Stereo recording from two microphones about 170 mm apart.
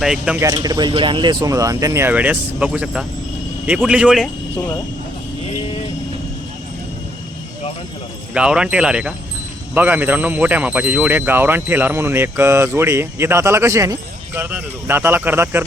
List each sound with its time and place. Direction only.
0.0 s speech: 5° right (ahead or behind)
0.3 s speech: 20° right (ahead or behind); by 4.3 s 5° right (ahead or behind)
8.3 s speech: 5° right (ahead or behind)